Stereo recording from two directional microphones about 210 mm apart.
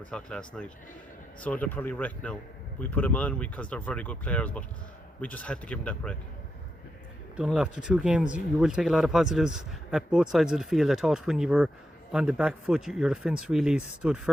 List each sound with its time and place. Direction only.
0.1 s speech: 5° left (ahead or behind)
7.3 s speech: 5° right (ahead or behind)